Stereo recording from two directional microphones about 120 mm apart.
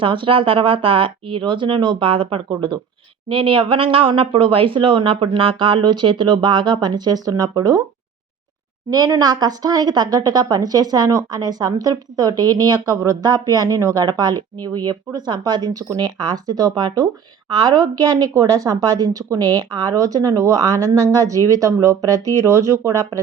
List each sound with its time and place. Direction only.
0.0 s speech: 45° right (ahead or behind)
2.5 s a woman's voice: 35° right (ahead or behind)
3.2 s speech: 45° right (ahead or behind); by 7.9 s 30° right (ahead or behind)
8.9 s a woman's voice: 30° right (ahead or behind)